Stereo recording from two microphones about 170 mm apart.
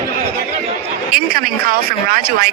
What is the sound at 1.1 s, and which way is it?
Speech, 60° right (ahead or behind).